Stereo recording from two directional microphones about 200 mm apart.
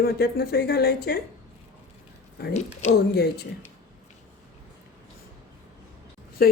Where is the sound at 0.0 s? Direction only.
50° left (ahead or behind).